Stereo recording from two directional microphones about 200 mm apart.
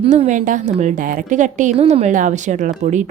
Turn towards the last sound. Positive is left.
turn(degrees=-40)  # may be behind; listen again after turning